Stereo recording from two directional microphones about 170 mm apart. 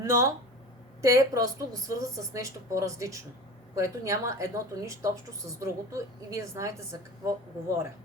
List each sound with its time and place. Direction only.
0.0 s a woman's voice: 15° right (ahead or behind)